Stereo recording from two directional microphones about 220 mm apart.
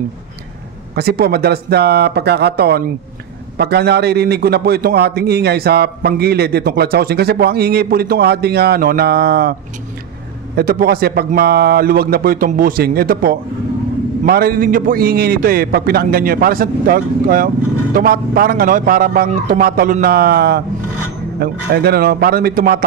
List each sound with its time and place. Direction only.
0.9 s a man's voice: 45° right (ahead or behind)